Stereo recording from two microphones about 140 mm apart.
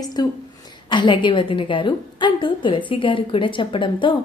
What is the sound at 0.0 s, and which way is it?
A woman's voice, 30° left (ahead or behind).